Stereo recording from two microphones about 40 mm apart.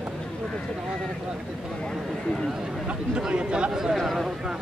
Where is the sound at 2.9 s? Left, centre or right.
Right.